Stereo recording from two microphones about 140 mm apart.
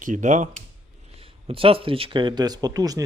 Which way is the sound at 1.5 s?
40° right (ahead or behind).